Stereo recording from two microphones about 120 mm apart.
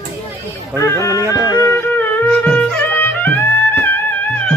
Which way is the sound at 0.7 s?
25° left (ahead or behind).